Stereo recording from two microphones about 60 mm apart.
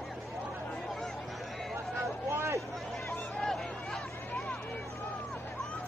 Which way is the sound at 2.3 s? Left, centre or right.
Right.